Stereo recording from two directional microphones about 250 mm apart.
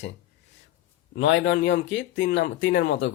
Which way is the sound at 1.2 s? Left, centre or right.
Left.